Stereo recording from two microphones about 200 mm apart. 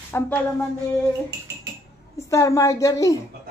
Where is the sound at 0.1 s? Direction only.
10° left (ahead or behind).